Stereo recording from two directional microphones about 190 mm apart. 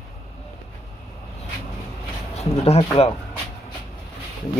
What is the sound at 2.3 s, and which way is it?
Speech, 35° left (ahead or behind).